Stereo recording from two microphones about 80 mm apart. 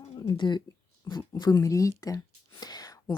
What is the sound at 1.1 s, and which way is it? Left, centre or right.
Speech, left.